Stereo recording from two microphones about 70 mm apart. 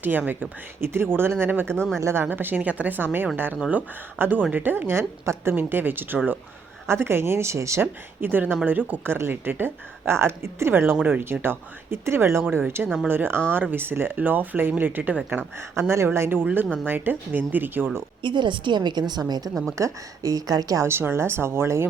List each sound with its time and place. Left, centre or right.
0.0 s a woman's voice: right
1.7 s speech: centre
2.0 s a woman's voice: right
2.3 s a woman's voice: right
5.5 s a woman's voice: right
7.8 s a woman's voice: right
15.7 s a woman's voice: right
18.4 s a woman's voice: right
19.6 s speech: right
20.8 s a woman's voice: right